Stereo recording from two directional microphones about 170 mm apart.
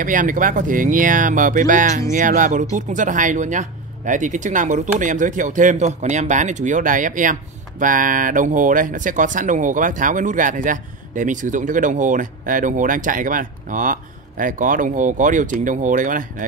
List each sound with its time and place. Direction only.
0.0 s speech: 50° right (ahead or behind)